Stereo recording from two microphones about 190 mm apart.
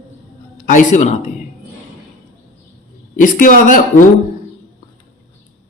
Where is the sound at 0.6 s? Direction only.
40° left (ahead or behind).